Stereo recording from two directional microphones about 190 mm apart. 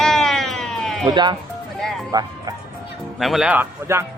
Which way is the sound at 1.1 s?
25° right (ahead or behind).